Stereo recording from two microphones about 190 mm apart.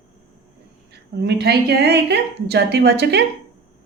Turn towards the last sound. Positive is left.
turn(degrees=-60)  # may be behind; listen again after turning